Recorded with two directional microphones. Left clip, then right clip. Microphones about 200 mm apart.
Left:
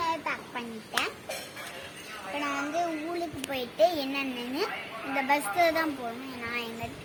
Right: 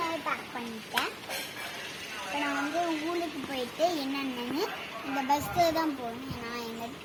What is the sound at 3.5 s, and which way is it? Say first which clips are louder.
A child's voice: left 5 dB; 25° left (ahead or behind).